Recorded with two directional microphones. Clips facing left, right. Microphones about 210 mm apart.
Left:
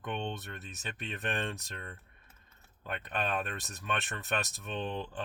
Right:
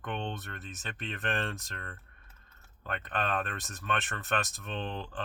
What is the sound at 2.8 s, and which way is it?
Speech, 10° left (ahead or behind).